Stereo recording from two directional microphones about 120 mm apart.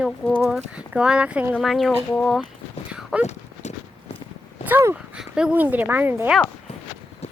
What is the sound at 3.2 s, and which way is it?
Horse, 70° left (ahead or behind).